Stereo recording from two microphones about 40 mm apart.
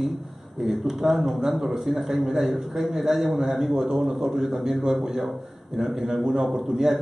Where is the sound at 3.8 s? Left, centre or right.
Centre.